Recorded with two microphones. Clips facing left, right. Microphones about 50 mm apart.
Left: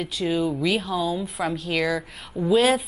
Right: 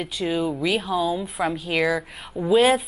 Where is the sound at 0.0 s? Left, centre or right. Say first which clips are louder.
Even; centre.